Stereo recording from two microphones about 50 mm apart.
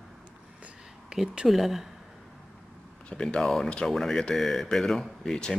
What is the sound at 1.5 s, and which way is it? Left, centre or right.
Speech, centre.